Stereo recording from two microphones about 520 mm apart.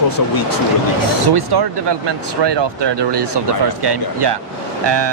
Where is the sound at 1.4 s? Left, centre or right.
Right.